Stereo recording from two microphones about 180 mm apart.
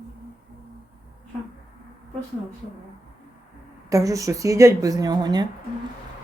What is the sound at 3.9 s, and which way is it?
Speech, 20° right (ahead or behind).